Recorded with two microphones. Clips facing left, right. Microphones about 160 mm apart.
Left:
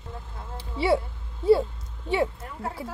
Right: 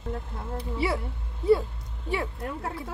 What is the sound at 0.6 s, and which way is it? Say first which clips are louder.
Speech: left 5 dB; 30° left (ahead or behind).